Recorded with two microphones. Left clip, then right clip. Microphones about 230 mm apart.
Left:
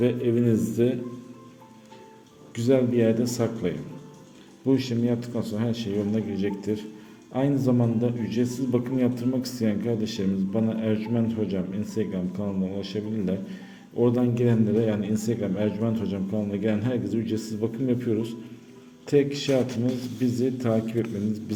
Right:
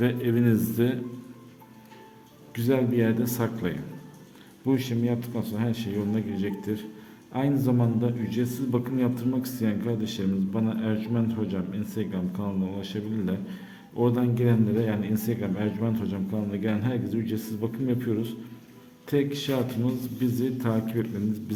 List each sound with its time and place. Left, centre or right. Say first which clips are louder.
0.0 s speech: left 2 dB; centre
2.6 s a man's voice: left 3 dB; centre